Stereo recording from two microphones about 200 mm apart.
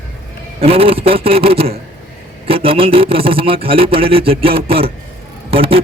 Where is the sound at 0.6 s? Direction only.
30° right (ahead or behind).